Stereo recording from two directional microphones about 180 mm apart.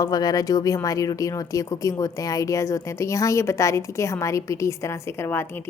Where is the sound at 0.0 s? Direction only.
20° left (ahead or behind).